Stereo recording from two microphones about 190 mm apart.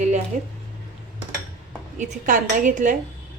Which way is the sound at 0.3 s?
35° right (ahead or behind).